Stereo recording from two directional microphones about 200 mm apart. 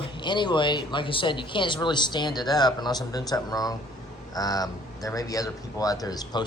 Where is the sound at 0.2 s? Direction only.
20° left (ahead or behind).